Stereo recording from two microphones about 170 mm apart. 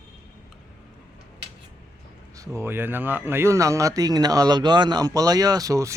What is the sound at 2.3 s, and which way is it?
Speech, 15° right (ahead or behind).